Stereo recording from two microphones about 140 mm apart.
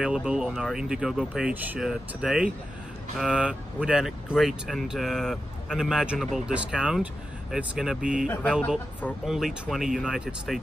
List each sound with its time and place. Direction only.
0.0 s speech: 5° right (ahead or behind)
8.3 s speech: 10° left (ahead or behind)
9.2 s speech: centre (ahead or behind)